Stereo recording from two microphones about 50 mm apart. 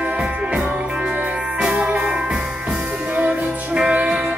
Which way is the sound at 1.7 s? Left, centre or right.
Right.